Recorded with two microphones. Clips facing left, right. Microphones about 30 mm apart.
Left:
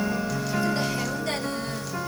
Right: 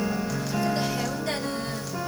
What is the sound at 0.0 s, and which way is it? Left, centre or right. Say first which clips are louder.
Music: left 1 dB; centre.